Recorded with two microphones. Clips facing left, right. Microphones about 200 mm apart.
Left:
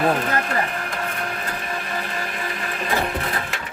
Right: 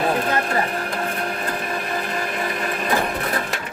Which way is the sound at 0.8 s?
35° right (ahead or behind).